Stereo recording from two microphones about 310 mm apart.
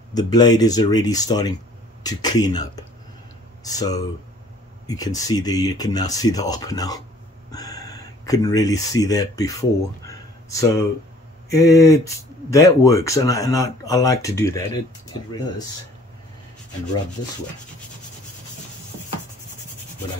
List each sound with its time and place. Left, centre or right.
0.1 s speech: centre